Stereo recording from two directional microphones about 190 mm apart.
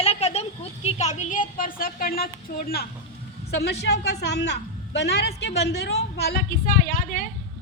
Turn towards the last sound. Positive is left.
turn(degrees=45)  # may be behind; listen again after turning